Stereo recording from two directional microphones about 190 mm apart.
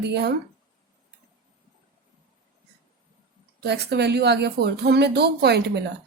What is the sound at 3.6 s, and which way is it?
A woman's voice, 60° right (ahead or behind).